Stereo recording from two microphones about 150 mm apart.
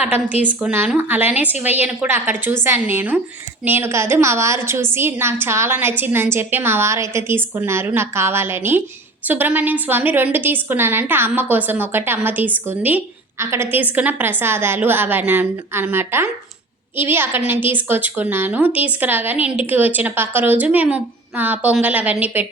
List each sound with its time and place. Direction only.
0.0 s a woman's voice: 10° right (ahead or behind)